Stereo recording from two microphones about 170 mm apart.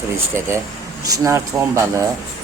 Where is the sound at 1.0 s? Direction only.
20° right (ahead or behind).